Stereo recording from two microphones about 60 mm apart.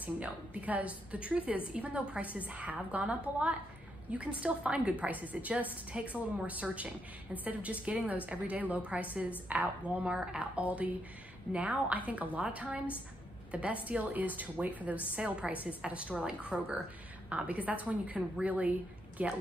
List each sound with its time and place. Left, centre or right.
0.0 s a woman's voice: right